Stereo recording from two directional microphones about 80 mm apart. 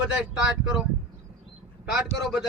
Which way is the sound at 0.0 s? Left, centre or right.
Centre.